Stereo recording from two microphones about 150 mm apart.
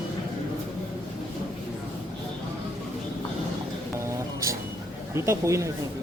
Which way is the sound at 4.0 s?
20° right (ahead or behind).